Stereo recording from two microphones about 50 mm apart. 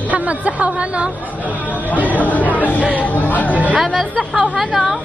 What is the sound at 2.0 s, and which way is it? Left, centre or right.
Speech, left.